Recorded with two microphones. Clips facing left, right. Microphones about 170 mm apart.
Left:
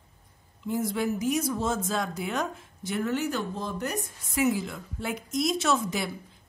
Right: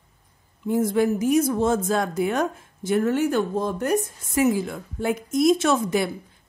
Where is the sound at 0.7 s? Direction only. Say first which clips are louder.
Right 7 dB; 50° right (ahead or behind).